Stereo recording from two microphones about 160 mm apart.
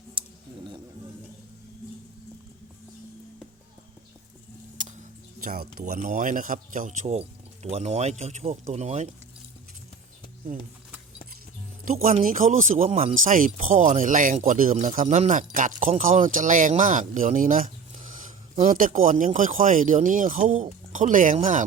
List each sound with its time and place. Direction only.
0.1 s a sound: 30° right (ahead or behind)
5.8 s speech: 55° right (ahead or behind)
12.2 s speech: 55° right (ahead or behind)
13.1 s speech: 55° right (ahead or behind)